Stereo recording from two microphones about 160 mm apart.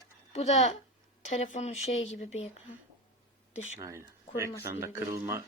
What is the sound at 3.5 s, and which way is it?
Speech, 45° left (ahead or behind).